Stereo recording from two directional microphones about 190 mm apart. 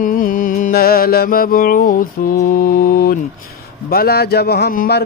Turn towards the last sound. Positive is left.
turn(degrees=55)  # may be behind; listen again after turning